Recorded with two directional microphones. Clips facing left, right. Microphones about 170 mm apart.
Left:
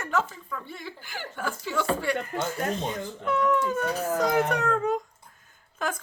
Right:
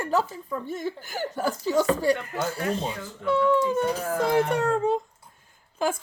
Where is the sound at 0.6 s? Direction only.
45° right (ahead or behind).